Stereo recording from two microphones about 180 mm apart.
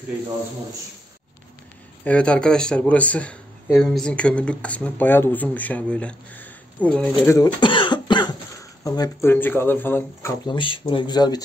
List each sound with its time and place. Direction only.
2.0 s speech: 5° left (ahead or behind)
7.3 s speech: 25° left (ahead or behind)
10.4 s speech: 25° left (ahead or behind)